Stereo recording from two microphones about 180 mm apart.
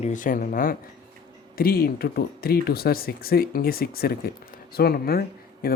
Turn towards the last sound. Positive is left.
turn(degrees=55)  # may be behind; listen again after turning